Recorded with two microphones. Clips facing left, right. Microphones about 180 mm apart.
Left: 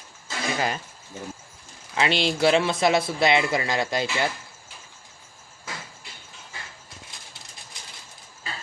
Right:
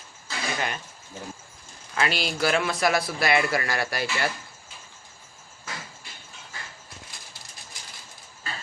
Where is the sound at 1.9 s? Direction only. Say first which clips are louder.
Left 3 dB; 25° left (ahead or behind).